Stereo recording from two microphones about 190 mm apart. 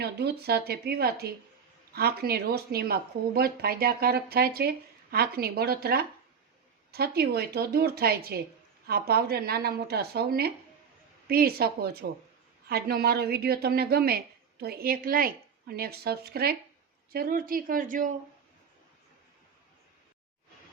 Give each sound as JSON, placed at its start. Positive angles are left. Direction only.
{"t": 0.0, "sound": "a woman's voice", "side_deg": -60}